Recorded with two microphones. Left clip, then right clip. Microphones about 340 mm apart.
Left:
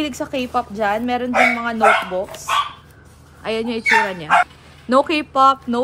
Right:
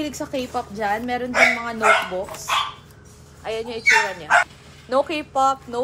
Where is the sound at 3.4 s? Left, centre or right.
Left.